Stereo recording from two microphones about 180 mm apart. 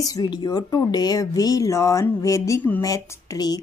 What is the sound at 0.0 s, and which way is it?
A woman's voice, 20° left (ahead or behind).